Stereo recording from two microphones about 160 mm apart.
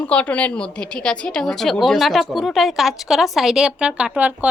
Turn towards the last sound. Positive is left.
turn(degrees=-10)  # may be behind; listen again after turning